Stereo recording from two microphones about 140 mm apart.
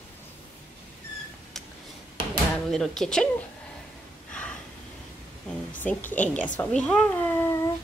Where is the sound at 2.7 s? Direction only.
5° left (ahead or behind).